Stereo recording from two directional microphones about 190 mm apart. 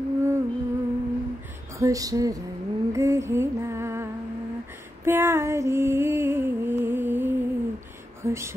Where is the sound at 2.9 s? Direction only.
15° right (ahead or behind).